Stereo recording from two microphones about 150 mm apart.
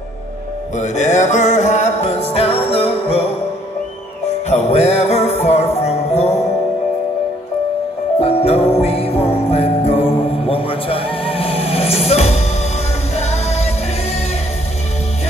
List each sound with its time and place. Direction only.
0.7 s music: 50° left (ahead or behind)
4.5 s music: 45° left (ahead or behind)
8.2 s music: 40° left (ahead or behind)